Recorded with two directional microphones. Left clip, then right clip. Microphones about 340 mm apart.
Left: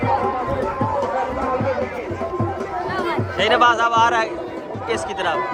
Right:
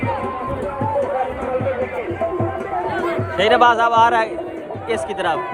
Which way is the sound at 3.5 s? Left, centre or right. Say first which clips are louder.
Right 2 dB; centre.